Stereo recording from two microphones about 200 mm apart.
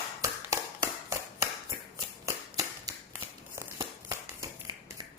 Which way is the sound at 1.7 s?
20° right (ahead or behind).